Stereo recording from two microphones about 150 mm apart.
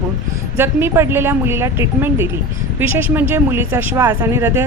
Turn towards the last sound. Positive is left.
turn(degrees=-15)  # may be behind; listen again after turning